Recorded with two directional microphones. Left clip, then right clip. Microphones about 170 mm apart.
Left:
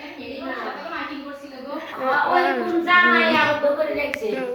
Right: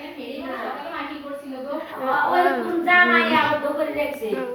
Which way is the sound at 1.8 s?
5° left (ahead or behind).